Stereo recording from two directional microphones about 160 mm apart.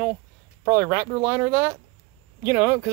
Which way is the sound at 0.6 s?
20° right (ahead or behind).